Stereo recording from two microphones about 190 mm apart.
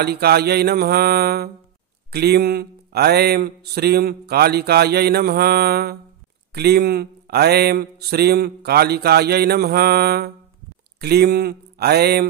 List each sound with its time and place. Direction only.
0.0 s speech: 55° right (ahead or behind)